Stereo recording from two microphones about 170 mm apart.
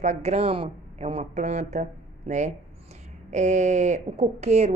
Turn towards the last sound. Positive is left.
turn(degrees=-40)  # may be behind; listen again after turning